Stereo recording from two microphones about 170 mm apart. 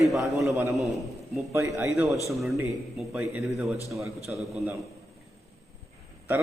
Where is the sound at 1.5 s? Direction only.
20° right (ahead or behind).